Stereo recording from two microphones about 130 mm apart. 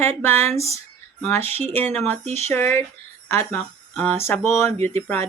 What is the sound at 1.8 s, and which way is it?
Speech, 15° left (ahead or behind).